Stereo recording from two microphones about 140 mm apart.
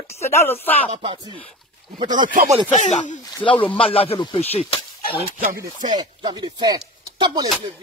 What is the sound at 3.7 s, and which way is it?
Speech, 40° left (ahead or behind).